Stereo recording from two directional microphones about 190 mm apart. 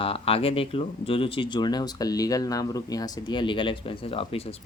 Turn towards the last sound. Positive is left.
turn(degrees=30)  # may be behind; listen again after turning